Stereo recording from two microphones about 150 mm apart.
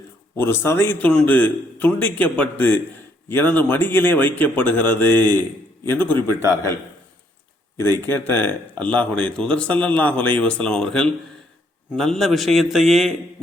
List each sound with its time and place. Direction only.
0.3 s a man's voice: 15° left (ahead or behind)
7.8 s a man's voice: 15° left (ahead or behind)